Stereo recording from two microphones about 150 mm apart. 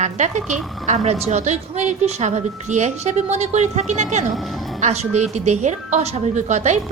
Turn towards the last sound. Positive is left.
turn(degrees=-50)  # may be behind; listen again after turning